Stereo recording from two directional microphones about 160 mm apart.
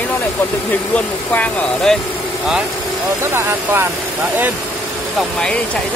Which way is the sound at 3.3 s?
15° right (ahead or behind).